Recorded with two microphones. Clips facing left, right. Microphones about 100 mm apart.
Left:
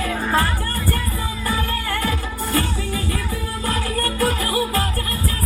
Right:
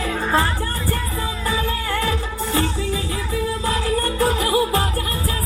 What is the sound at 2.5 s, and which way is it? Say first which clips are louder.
Music: right 1 dB; 20° right (ahead or behind).